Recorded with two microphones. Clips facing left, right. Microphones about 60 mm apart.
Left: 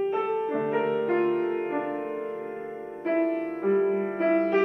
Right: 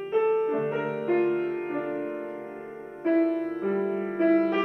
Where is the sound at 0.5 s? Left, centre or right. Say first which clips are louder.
Left 3 dB; left.